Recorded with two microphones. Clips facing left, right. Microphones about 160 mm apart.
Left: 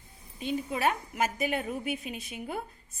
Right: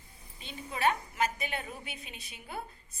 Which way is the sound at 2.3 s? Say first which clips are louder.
Left 2 dB; 45° left (ahead or behind).